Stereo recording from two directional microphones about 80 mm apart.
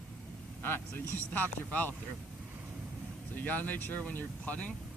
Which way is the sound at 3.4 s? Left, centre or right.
Left.